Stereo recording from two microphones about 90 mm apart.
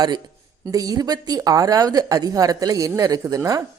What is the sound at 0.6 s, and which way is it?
A woman's voice, 40° right (ahead or behind).